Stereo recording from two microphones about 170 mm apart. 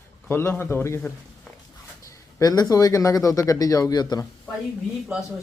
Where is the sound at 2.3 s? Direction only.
20° left (ahead or behind).